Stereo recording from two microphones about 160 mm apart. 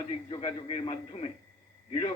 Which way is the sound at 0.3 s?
35° left (ahead or behind).